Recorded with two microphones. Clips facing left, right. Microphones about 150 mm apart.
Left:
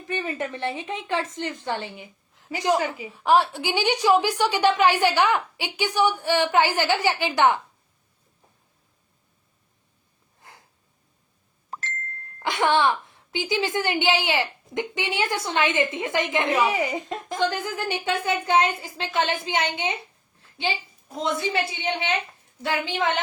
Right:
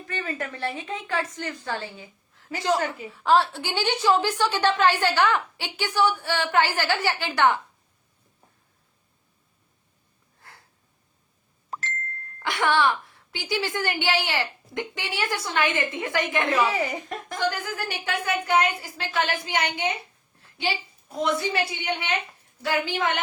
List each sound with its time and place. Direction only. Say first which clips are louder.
0.1 s a woman's voice: left 3 dB; 20° left (ahead or behind)
10.4 s a sound: left 1 dB; 20° left (ahead or behind)
12.4 s a woman's voice: left 2 dB; 20° left (ahead or behind)
21.2 s a woman's voice: even; 20° left (ahead or behind)